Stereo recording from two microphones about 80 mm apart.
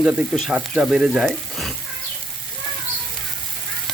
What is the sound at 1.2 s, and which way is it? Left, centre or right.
Speech, centre.